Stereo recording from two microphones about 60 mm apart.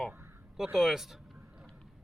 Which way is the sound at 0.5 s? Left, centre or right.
Centre.